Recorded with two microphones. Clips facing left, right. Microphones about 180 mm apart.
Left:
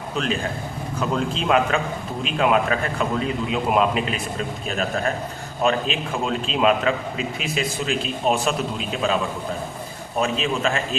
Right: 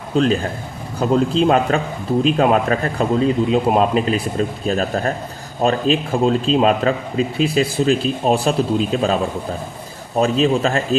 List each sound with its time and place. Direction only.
0.1 s a man's voice: 30° right (ahead or behind)
10.2 s a man's voice: 35° right (ahead or behind)